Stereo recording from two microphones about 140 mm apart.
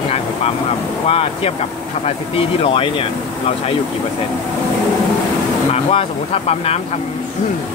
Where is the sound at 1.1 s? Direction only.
45° left (ahead or behind).